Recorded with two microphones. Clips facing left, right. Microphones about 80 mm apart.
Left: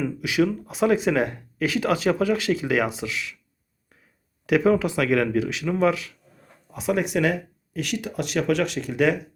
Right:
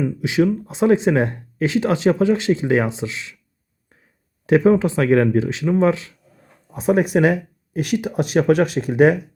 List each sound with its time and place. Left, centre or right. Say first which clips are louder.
0.0 s speech: right 4 dB; right
4.4 s speech: right 5 dB; right
6.7 s speech: right 6 dB; right